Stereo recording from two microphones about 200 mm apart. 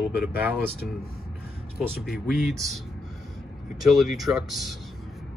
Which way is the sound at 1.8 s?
Centre (ahead or behind).